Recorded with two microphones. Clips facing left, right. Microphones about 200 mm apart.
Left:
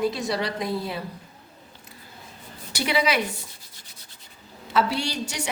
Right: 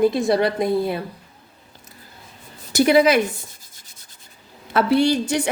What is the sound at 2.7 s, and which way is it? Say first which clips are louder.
Speech: right 9 dB; 45° right (ahead or behind).